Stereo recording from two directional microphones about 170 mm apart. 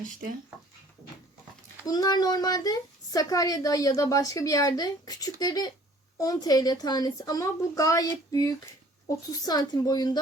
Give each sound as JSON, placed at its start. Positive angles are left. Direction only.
{"t": 1.9, "sound": "a woman's voice", "side_deg": 25}